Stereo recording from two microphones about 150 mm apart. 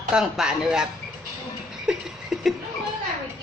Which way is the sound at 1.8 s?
5° right (ahead or behind).